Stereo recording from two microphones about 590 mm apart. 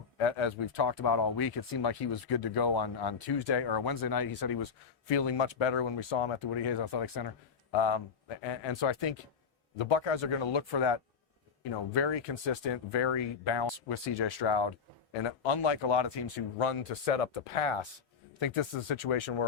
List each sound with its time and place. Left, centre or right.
0.2 s speech: left
16.9 s speech: left